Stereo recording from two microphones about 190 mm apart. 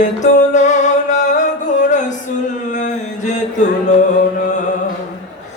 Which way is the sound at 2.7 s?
40° left (ahead or behind).